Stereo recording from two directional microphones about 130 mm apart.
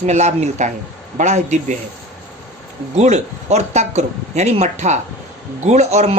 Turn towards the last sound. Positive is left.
turn(degrees=-60)  # may be behind; listen again after turning